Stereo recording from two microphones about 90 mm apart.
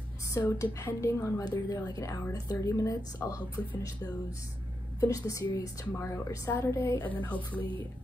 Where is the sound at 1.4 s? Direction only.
45° left (ahead or behind).